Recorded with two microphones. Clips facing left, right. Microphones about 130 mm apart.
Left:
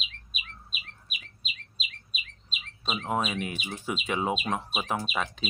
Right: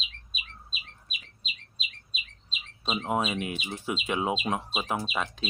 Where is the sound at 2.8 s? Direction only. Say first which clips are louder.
Right 2 dB; 20° right (ahead or behind).